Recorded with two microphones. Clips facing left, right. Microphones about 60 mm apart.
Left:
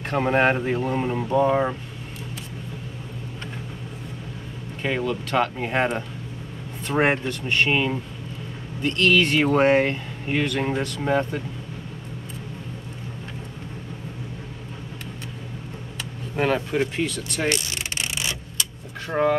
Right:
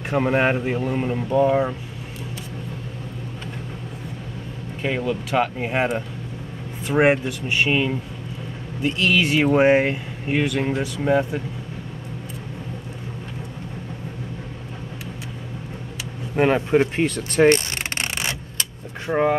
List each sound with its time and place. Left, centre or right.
0.1 s speech: centre
4.8 s speech: centre
16.3 s vehicle: right
19.0 s speech: centre